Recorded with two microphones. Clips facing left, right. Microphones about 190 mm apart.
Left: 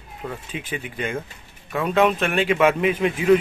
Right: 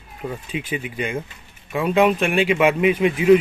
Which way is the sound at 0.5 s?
40° left (ahead or behind).